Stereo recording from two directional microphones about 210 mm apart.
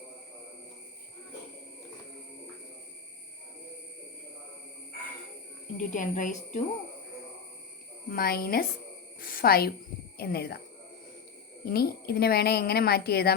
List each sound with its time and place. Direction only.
5.7 s speech: 35° left (ahead or behind)
8.1 s speech: 45° left (ahead or behind)
11.6 s speech: 45° left (ahead or behind)